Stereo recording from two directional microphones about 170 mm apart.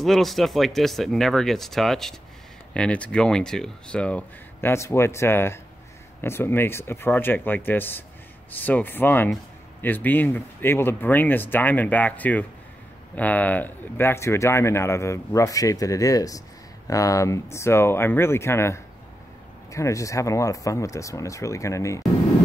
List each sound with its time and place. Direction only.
0.0 s speech: centre (ahead or behind); by 22.0 s 20° left (ahead or behind)